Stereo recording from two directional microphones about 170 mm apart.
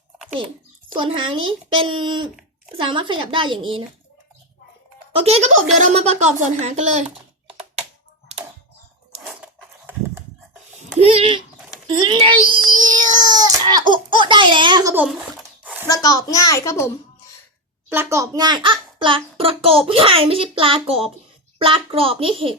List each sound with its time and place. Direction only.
0.9 s speech: 30° right (ahead or behind)
5.1 s a child's voice: 35° right (ahead or behind)
9.2 s a sound: 10° right (ahead or behind)
11.1 s a child's voice: 35° right (ahead or behind)
11.9 s child singing: 30° right (ahead or behind)
14.9 s a sound: 5° right (ahead or behind)
15.9 s a child's voice: 20° left (ahead or behind)
17.9 s a child's voice: 15° right (ahead or behind); by 22.5 s 30° right (ahead or behind)